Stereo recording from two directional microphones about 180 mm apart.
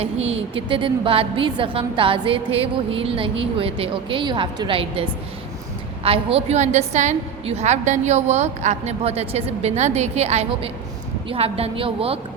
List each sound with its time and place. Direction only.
0.0 s a woman's voice: 35° right (ahead or behind)